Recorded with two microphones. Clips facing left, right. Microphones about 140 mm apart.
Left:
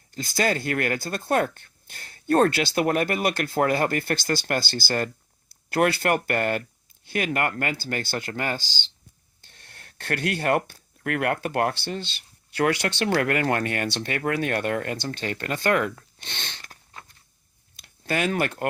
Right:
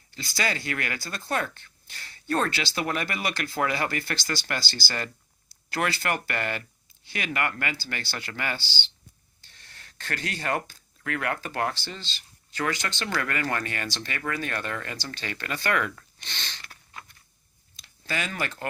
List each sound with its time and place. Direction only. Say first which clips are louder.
0.1 s speech: left 6 dB; 50° left (ahead or behind)
9.4 s speech: left 2 dB; 55° left (ahead or behind)
16.6 s a sound: even; 35° left (ahead or behind)
17.7 s speech: left 6 dB; 55° left (ahead or behind)